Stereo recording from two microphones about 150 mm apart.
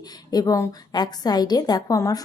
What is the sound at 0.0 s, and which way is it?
A woman's voice, 25° left (ahead or behind).